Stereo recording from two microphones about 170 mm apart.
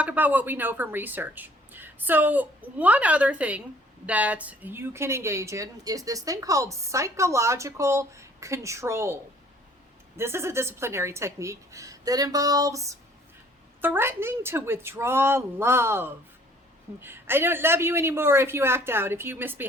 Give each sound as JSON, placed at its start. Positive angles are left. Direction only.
{"t": 0.0, "sound": "speech", "side_deg": -10}
{"t": 10.2, "sound": "speech", "side_deg": -15}